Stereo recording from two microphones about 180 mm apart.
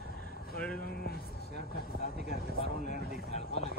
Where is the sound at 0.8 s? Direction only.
60° left (ahead or behind).